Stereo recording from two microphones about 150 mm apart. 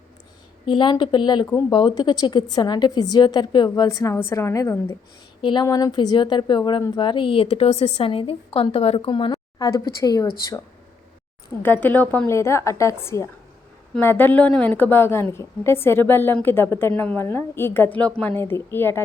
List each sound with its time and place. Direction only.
0.6 s a woman's voice: 35° left (ahead or behind); by 4.9 s 20° left (ahead or behind)
5.4 s a woman's voice: 35° left (ahead or behind)
11.6 s a woman's voice: 10° left (ahead or behind)